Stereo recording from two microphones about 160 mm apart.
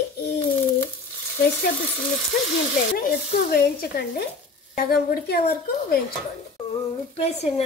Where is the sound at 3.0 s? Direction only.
70° left (ahead or behind).